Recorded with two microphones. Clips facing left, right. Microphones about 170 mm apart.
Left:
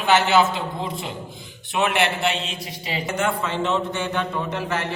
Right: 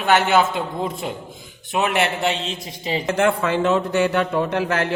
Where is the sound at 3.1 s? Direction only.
60° right (ahead or behind).